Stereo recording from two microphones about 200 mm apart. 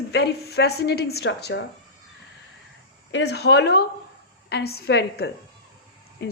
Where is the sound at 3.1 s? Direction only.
60° left (ahead or behind).